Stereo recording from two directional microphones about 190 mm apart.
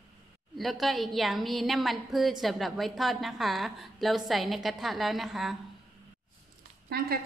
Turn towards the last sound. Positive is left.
turn(degrees=-55)  # may be behind; listen again after turning